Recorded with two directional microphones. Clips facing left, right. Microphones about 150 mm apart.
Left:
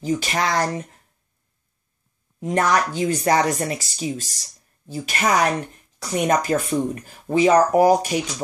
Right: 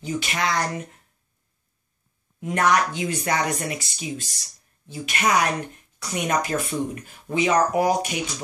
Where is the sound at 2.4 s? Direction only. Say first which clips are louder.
Left 1 dB; 35° left (ahead or behind).